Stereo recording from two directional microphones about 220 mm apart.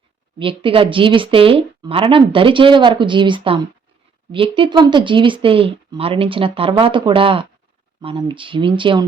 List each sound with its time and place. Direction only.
0.3 s a woman's voice: 25° right (ahead or behind)